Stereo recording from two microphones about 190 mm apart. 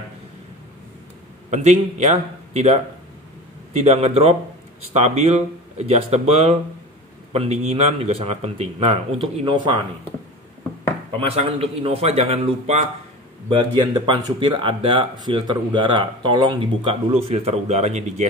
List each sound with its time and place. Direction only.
1.5 s speech: 35° right (ahead or behind)
11.1 s speech: 30° right (ahead or behind)